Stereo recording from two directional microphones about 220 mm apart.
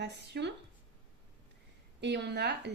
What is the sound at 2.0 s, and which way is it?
Speech, 50° right (ahead or behind).